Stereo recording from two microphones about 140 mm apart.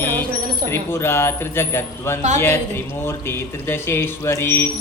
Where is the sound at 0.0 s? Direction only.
15° left (ahead or behind).